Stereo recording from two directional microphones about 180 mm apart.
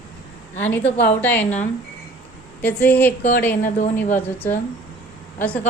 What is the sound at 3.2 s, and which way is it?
Speech, 45° left (ahead or behind).